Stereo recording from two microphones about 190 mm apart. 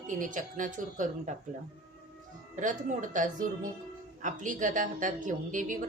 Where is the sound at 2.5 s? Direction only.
40° right (ahead or behind).